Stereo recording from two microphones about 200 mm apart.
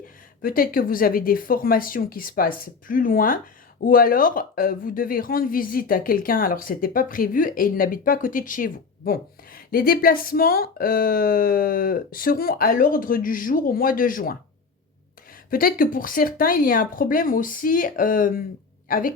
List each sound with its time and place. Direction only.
0.4 s speech: 45° left (ahead or behind)
15.4 s speech: 45° left (ahead or behind)